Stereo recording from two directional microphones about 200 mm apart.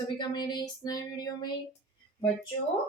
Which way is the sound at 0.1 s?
20° left (ahead or behind).